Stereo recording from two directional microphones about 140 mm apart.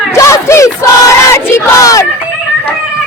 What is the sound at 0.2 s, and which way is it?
Battle cry, 20° left (ahead or behind).